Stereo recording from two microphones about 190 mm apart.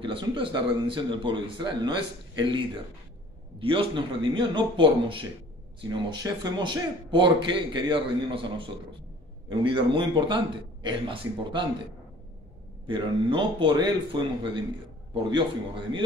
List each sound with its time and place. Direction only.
0.0 s a man's voice: 25° right (ahead or behind)
3.6 s a man's voice: 25° right (ahead or behind)
12.8 s a man's voice: 25° right (ahead or behind)